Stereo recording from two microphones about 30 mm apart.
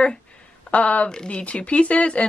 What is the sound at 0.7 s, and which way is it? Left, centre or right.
Speech, left.